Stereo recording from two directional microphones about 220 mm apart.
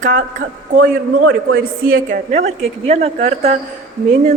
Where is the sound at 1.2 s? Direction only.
65° right (ahead or behind).